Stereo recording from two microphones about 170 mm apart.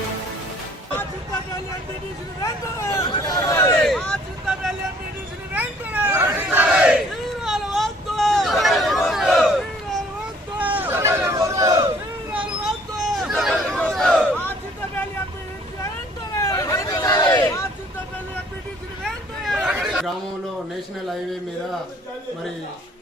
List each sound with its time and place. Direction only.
2.4 s speech: 15° left (ahead or behind)
3.8 s hubbub: 5° left (ahead or behind)
5.5 s hubbub: 10° right (ahead or behind)
10.6 s a sound: 10° right (ahead or behind)
12.3 s hubbub: 5° right (ahead or behind)
16.4 s a sound: 20° left (ahead or behind)
19.0 s hubbub: centre (ahead or behind)